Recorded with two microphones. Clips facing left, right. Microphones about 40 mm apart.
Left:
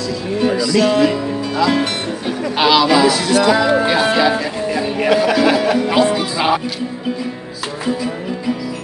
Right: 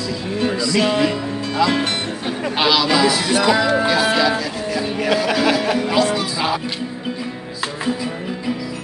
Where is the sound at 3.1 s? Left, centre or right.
Centre.